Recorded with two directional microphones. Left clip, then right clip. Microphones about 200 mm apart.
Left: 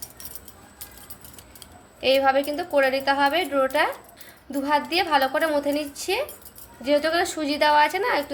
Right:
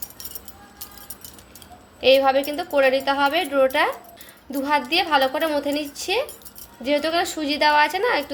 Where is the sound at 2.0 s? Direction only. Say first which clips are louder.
Right 3 dB; 15° right (ahead or behind).